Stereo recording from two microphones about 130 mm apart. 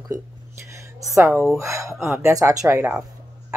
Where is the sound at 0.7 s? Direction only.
20° right (ahead or behind).